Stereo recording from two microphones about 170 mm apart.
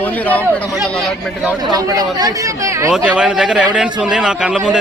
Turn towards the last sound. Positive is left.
turn(degrees=-5)  # may be behind; listen again after turning